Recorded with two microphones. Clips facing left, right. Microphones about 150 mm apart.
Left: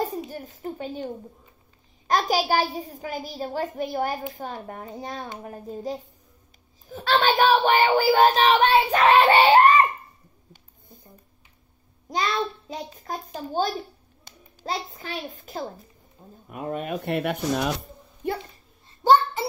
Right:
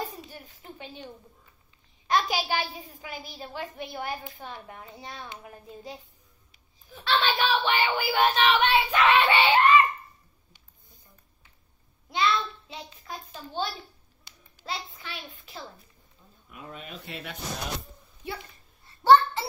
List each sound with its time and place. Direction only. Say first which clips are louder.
0.3 s a child's voice: left 11 dB; 45° left (ahead or behind)
10.5 s a sound: left 12 dB; 50° left (ahead or behind)
12.1 s a child's voice: left 1 dB; 40° left (ahead or behind)